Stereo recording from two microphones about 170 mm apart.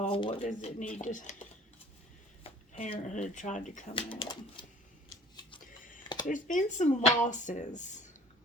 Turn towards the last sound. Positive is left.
turn(degrees=45)  # may be behind; listen again after turning